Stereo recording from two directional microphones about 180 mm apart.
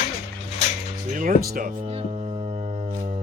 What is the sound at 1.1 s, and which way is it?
Speech, 50° right (ahead or behind).